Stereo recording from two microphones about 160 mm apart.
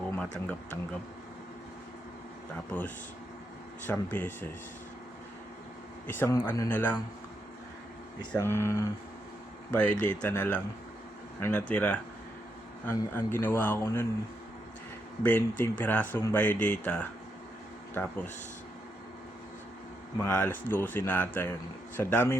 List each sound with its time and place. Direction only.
0.2 s speech: 10° left (ahead or behind)
3.8 s speech: 10° left (ahead or behind)
6.1 s speech: 10° left (ahead or behind)
8.3 s speech: 15° left (ahead or behind)
10.2 s speech: 10° left (ahead or behind)
15.2 s speech: 10° left (ahead or behind)
20.1 s speech: 15° left (ahead or behind)